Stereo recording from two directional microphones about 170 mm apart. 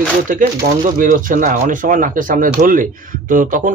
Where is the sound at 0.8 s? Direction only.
50° right (ahead or behind).